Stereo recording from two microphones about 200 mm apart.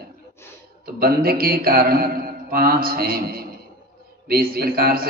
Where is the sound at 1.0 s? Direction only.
50° right (ahead or behind).